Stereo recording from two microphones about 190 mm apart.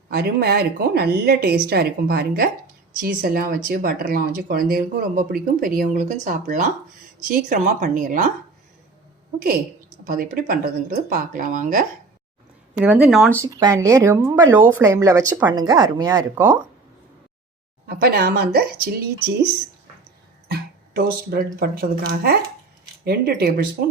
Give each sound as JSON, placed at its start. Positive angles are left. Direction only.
{"t": 0.1, "sound": "a woman's voice", "side_deg": -55}
{"t": 10.1, "sound": "speech", "side_deg": -50}
{"t": 12.7, "sound": "speech", "side_deg": -5}
{"t": 13.3, "sound": "speech", "side_deg": -15}
{"t": 17.8, "sound": "a woman's voice", "side_deg": -55}
{"t": 20.5, "sound": "a woman's voice", "side_deg": -55}